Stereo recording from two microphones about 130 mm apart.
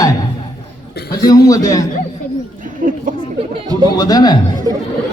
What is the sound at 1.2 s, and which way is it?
Speech, 30° left (ahead or behind).